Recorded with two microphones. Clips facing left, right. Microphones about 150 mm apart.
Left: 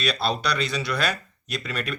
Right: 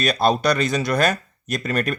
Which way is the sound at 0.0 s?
45° right (ahead or behind).